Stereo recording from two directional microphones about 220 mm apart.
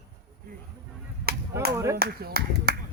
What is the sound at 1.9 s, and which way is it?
Speech, 45° right (ahead or behind).